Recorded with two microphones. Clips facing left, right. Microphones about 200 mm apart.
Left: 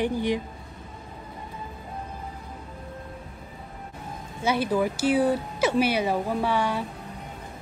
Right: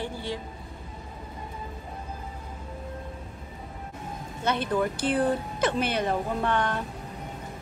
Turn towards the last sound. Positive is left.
turn(degrees=10)  # may be behind; listen again after turning